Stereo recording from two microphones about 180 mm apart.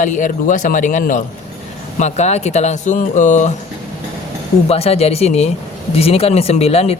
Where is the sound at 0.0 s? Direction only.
45° left (ahead or behind).